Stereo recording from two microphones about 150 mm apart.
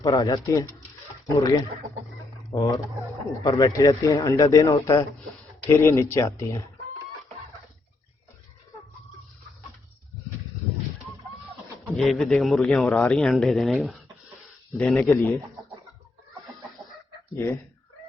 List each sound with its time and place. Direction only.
0.0 s speech: 25° left (ahead or behind)
11.9 s a man's voice: centre (ahead or behind)
15.0 s speech: 20° left (ahead or behind)
17.3 s speech: 20° left (ahead or behind)